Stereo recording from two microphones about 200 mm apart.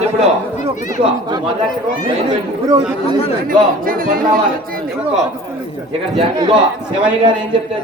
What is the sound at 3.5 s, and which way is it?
A man's voice, 45° right (ahead or behind).